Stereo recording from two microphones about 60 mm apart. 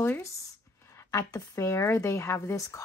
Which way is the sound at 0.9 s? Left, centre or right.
Left.